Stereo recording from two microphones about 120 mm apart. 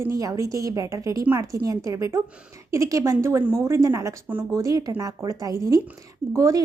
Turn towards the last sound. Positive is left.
turn(degrees=-25)  # may be behind; listen again after turning